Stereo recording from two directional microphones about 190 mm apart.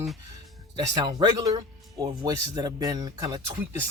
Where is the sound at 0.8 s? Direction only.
20° right (ahead or behind).